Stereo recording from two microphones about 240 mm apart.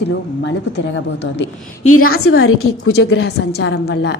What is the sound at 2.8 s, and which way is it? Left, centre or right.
A woman's voice, left.